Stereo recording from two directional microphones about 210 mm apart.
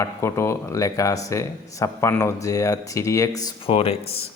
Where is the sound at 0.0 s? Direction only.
15° left (ahead or behind); by 4.3 s 30° left (ahead or behind).